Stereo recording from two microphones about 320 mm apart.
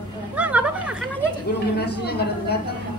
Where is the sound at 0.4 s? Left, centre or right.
Centre.